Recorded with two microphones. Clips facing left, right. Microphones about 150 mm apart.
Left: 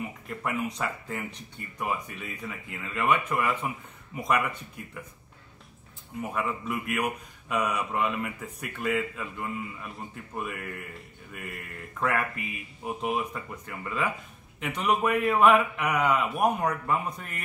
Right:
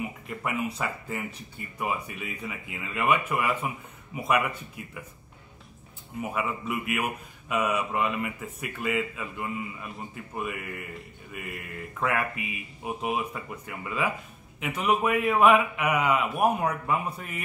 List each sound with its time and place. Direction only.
0.3 s speech: 5° right (ahead or behind)
6.2 s speech: 5° right (ahead or behind)